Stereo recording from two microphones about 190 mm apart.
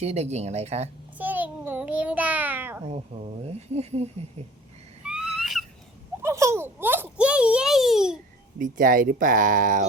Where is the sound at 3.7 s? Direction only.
35° right (ahead or behind).